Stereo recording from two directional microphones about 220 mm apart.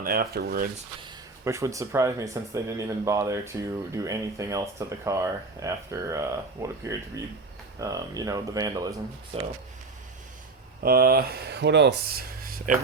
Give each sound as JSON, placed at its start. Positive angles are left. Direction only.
{"t": 0.0, "sound": "speech", "side_deg": -45}
{"t": 1.0, "sound": "speech", "side_deg": -15}
{"t": 10.8, "sound": "speech", "side_deg": -45}